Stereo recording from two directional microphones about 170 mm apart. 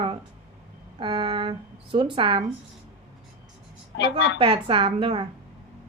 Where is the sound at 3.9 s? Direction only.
90° left.